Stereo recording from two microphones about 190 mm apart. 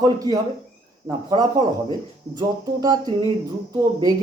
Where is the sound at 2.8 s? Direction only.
20° right (ahead or behind).